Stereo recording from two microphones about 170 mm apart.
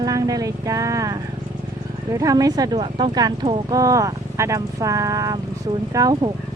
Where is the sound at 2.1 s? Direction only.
20° right (ahead or behind).